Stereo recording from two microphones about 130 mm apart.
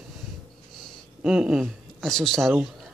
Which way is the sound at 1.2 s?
5° right (ahead or behind).